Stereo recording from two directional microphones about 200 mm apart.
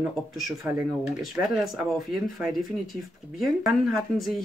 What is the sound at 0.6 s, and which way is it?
Speech, 10° right (ahead or behind).